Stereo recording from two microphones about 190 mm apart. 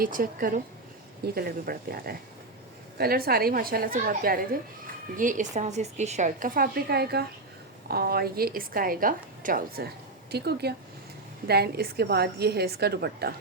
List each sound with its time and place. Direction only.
0.0 s a woman's voice: 50° right (ahead or behind)